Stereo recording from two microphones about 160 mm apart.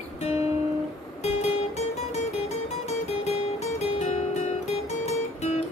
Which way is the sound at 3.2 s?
40° left (ahead or behind).